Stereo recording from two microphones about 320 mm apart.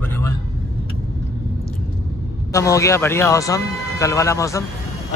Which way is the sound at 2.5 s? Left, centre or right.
Centre.